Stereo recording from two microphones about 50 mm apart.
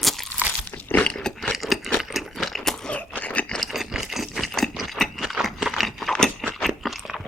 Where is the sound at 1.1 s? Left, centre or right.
Centre.